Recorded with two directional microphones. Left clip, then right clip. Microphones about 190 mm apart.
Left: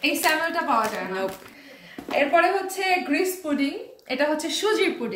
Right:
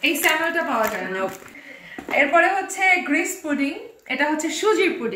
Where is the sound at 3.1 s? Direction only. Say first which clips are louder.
Right 2 dB; 20° left (ahead or behind).